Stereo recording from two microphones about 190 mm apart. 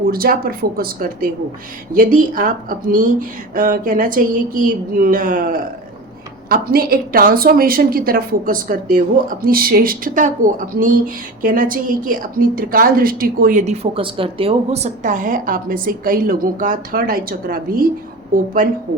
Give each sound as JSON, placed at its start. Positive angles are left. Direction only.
{"t": 0.1, "sound": "a woman's voice", "side_deg": -50}
{"t": 13.9, "sound": "a woman's voice", "side_deg": -30}